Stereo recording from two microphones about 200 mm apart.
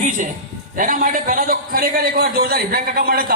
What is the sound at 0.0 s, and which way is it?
A man's voice, 40° right (ahead or behind).